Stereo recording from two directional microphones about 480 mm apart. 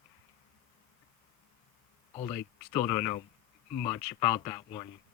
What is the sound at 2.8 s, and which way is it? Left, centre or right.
Speech, centre.